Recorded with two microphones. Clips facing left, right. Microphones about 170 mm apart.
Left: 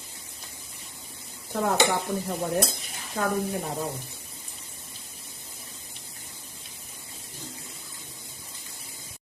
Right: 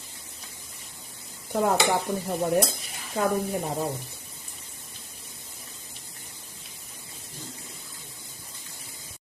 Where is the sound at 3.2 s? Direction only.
15° right (ahead or behind).